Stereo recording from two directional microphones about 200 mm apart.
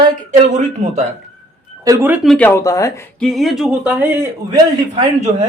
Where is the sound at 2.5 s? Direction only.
15° left (ahead or behind).